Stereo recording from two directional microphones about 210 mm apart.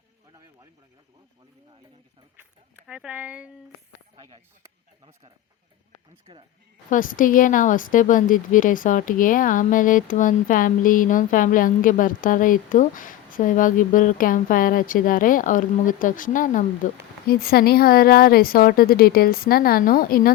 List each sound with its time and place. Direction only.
2.3 s speech: 10° right (ahead or behind)
4.1 s speech: 25° right (ahead or behind)
6.9 s a woman's voice: 40° left (ahead or behind)